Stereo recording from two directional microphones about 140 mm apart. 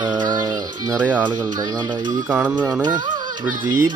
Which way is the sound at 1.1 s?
10° right (ahead or behind).